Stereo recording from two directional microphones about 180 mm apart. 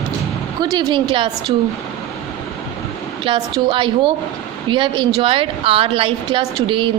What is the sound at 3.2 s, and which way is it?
A woman's voice, 30° right (ahead or behind).